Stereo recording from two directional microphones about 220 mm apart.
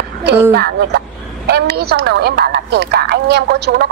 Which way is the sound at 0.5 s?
45° right (ahead or behind).